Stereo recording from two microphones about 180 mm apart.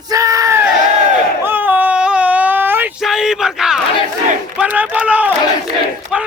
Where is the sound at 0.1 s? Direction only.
20° right (ahead or behind).